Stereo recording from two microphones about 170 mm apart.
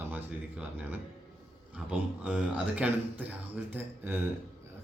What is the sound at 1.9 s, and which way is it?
Speech, 5° right (ahead or behind).